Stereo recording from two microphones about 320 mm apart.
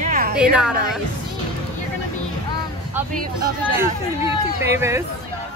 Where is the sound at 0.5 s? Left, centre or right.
Centre.